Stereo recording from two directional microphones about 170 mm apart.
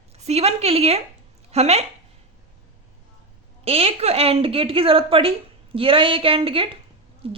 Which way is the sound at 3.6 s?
35° right (ahead or behind).